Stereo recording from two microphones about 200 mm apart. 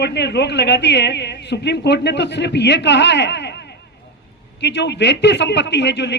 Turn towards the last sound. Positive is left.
turn(degrees=60)  # may be behind; listen again after turning